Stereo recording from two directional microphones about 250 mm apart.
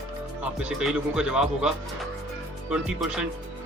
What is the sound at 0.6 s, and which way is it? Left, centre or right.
Speech, centre.